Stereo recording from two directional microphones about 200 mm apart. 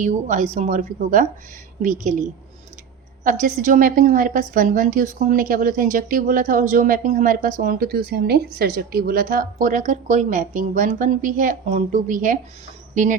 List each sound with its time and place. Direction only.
0.0 s a woman's voice: 35° right (ahead or behind)
3.2 s a woman's voice: 40° right (ahead or behind)